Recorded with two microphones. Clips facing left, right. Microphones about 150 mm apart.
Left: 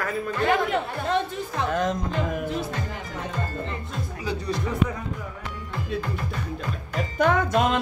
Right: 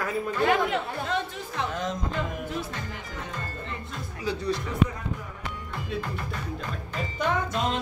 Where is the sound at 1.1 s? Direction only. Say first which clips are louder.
Left 5 dB; 50° left (ahead or behind).